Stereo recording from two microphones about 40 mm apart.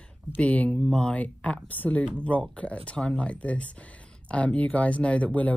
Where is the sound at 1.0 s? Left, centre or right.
Left.